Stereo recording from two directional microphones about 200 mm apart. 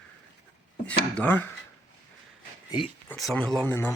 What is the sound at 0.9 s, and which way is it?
Speech, 10° left (ahead or behind).